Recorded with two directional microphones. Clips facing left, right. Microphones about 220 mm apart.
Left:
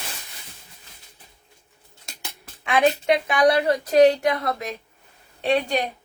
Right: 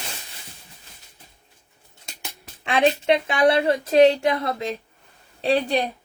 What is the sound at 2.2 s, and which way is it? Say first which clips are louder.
A woman's voice: right 1 dB; 30° right (ahead or behind).